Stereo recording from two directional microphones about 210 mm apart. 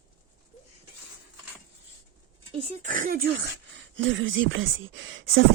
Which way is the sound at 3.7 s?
65° right (ahead or behind).